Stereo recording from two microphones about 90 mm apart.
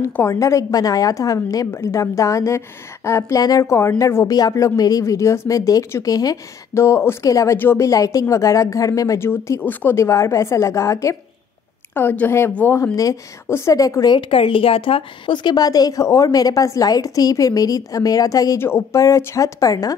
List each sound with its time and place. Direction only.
0.1 s a woman's voice: 30° left (ahead or behind)
4.3 s a woman's voice: 40° left (ahead or behind)
6.7 s a woman's voice: 30° left (ahead or behind)
7.5 s speech: 25° left (ahead or behind)
7.8 s a woman's voice: 40° left (ahead or behind)
9.2 s speech: 25° left (ahead or behind)
9.9 s a woman's voice: 30° left (ahead or behind)
11.9 s speech: 20° left (ahead or behind)
12.9 s a woman's voice: 40° left (ahead or behind)
14.1 s a woman's voice: 80° left; by 18.6 s 40° left (ahead or behind)
18.6 s a woman's voice: 30° left (ahead or behind)